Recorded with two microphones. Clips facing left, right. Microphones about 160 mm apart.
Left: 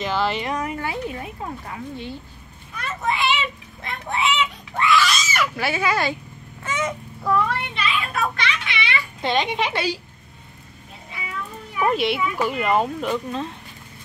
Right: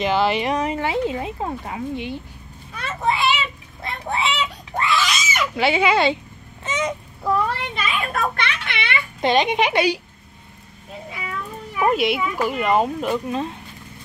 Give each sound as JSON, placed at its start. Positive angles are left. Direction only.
{"t": 0.0, "sound": "a woman's voice", "side_deg": -15}
{"t": 2.8, "sound": "children playing", "side_deg": -30}
{"t": 3.8, "sound": "a sound", "side_deg": -35}
{"t": 5.1, "sound": "a sound", "side_deg": -10}
{"t": 5.4, "sound": "speech", "side_deg": -20}
{"t": 6.6, "sound": "goose", "side_deg": -20}
{"t": 7.3, "sound": "a child's voice", "side_deg": -45}
{"t": 9.2, "sound": "a woman's voice", "side_deg": -20}
{"t": 11.9, "sound": "speech", "side_deg": -5}